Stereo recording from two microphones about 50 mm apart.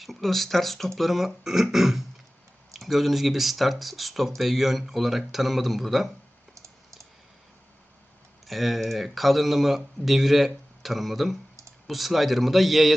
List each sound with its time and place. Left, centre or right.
0.0 s speech: centre
6.5 s typing: right
8.4 s speech: centre